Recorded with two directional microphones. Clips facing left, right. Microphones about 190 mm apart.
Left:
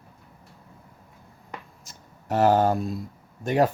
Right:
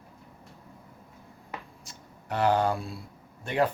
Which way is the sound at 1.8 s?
45° left (ahead or behind).